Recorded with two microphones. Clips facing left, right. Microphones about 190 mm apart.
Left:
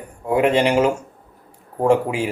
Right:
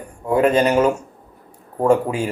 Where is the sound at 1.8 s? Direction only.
10° left (ahead or behind).